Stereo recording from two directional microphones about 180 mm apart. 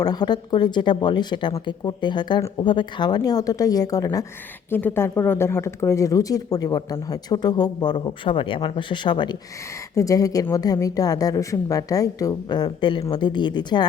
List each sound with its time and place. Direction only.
0.0 s speech: 20° left (ahead or behind)